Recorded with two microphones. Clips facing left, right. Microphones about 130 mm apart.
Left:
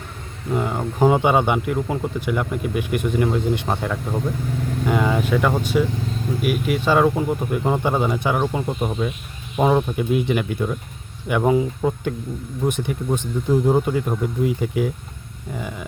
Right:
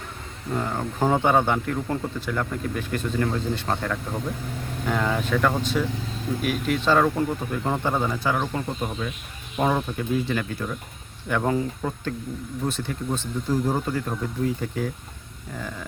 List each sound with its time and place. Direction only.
0.5 s speech: 10° left (ahead or behind)